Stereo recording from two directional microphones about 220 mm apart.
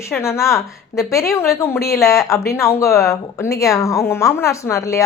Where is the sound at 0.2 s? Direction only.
15° left (ahead or behind).